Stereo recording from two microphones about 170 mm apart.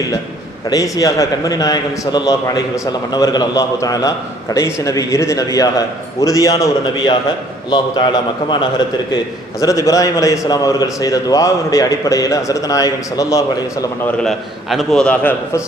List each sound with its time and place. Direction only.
0.7 s a man's voice: 20° left (ahead or behind)
9.6 s a man's voice: 20° left (ahead or behind)
14.0 s a man's voice: 5° left (ahead or behind)